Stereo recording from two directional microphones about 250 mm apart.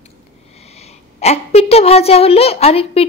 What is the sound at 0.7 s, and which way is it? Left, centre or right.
A woman's voice, left.